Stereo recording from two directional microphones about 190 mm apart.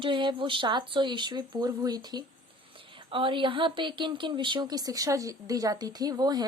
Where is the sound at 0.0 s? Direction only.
25° right (ahead or behind).